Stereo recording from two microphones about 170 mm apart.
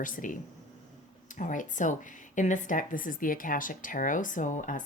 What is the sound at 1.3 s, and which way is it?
Speech, 50° left (ahead or behind).